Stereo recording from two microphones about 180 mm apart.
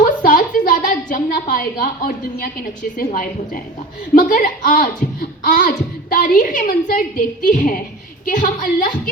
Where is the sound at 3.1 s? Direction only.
50° left (ahead or behind).